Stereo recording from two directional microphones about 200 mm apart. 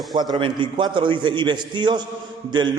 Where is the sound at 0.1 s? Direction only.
20° right (ahead or behind).